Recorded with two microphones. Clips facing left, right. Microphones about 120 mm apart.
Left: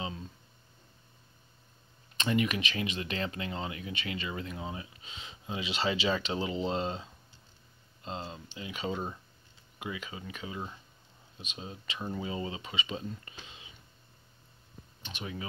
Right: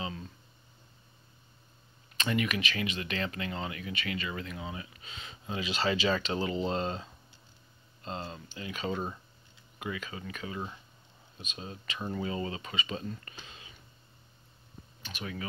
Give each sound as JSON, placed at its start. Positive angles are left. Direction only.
{"t": 2.1, "sound": "speech", "side_deg": 25}
{"t": 15.0, "sound": "speech", "side_deg": 25}